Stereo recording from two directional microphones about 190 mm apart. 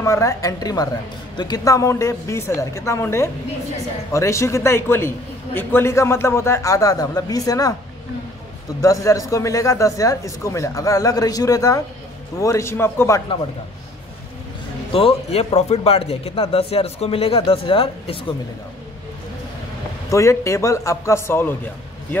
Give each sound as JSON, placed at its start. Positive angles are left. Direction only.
{"t": 0.0, "sound": "a man's voice", "side_deg": 15}
{"t": 8.8, "sound": "a man's voice", "side_deg": 15}
{"t": 14.9, "sound": "speech", "side_deg": 30}
{"t": 20.1, "sound": "a man's voice", "side_deg": 15}